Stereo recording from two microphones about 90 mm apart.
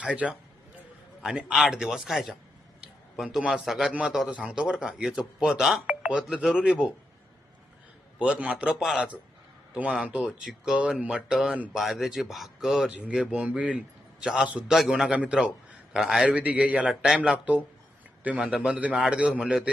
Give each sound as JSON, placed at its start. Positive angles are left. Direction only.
{"t": 0.0, "sound": "a man's voice", "side_deg": -10}
{"t": 8.2, "sound": "a man's voice", "side_deg": -10}